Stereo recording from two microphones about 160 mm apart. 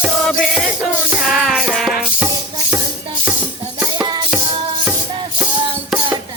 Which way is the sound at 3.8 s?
25° right (ahead or behind).